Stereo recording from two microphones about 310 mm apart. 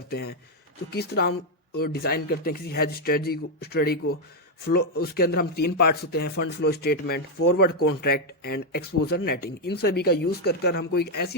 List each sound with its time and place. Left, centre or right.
0.1 s a man's voice: left